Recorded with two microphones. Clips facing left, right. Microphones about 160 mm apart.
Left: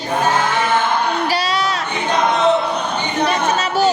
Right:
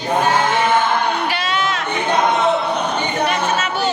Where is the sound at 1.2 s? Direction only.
35° left (ahead or behind).